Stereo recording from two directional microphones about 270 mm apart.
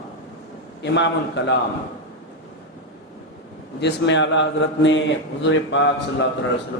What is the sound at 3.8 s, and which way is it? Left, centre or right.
A man's voice, left.